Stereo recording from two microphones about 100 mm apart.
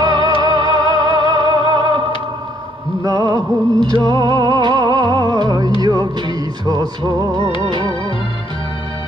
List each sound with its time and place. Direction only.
0.0 s music: 45° right (ahead or behind)